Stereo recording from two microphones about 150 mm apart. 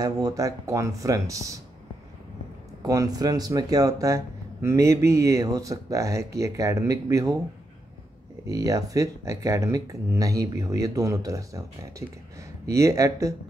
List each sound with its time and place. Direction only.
0.0 s speech: 25° right (ahead or behind)
2.8 s speech: 25° right (ahead or behind)
8.5 s speech: 25° right (ahead or behind)